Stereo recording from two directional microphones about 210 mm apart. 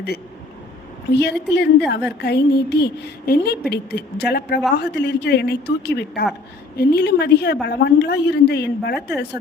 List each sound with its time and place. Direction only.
1.1 s a woman's voice: 55° left (ahead or behind)